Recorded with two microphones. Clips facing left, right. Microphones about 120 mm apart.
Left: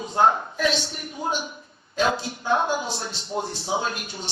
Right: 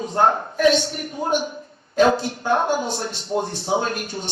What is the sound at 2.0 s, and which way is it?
A man's voice, 45° right (ahead or behind).